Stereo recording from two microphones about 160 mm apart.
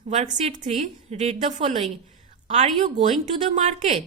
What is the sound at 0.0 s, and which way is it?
A woman's voice, 45° right (ahead or behind).